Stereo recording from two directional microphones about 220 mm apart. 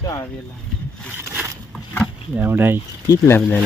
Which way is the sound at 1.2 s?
10° right (ahead or behind).